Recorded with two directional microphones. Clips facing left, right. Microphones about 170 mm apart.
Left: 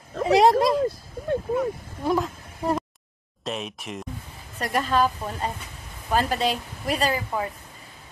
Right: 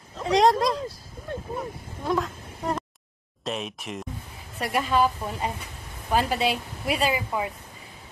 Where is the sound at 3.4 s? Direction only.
Centre (ahead or behind).